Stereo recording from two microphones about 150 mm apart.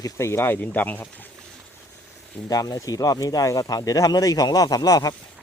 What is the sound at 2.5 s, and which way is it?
Speech, 25° left (ahead or behind).